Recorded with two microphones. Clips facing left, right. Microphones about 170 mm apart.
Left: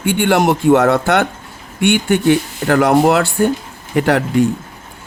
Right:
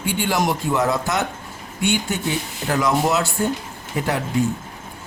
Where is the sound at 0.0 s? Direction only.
65° left (ahead or behind).